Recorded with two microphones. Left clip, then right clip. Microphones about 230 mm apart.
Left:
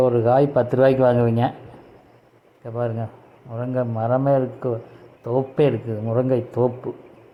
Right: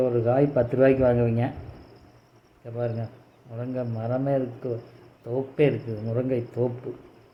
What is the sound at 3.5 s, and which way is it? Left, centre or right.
Speech, centre.